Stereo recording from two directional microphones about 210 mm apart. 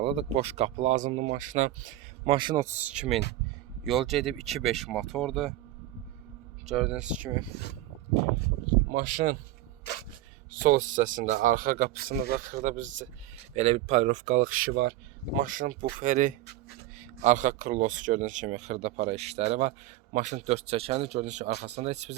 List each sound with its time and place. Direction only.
0.0 s speech: 25° right (ahead or behind)
2.3 s speech: 20° right (ahead or behind); by 5.5 s centre (ahead or behind)
6.7 s speech: 5° right (ahead or behind)
8.9 s speech: 40° right (ahead or behind)
10.6 s speech: 40° right (ahead or behind)